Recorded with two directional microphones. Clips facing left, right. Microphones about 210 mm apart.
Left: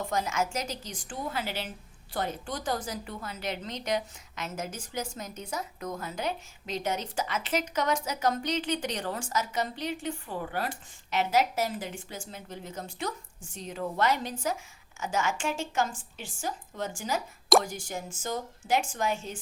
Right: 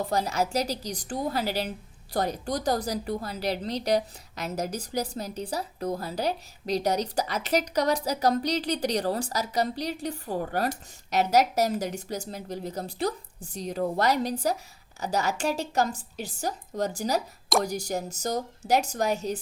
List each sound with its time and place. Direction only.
0.0 s a woman's voice: 35° right (ahead or behind)